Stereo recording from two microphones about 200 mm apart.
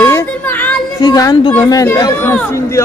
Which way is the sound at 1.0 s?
20° left (ahead or behind).